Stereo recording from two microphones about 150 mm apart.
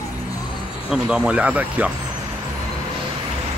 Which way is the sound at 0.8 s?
5° right (ahead or behind).